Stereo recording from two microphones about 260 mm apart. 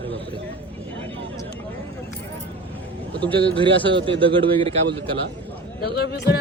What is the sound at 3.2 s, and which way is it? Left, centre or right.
A man's voice, centre.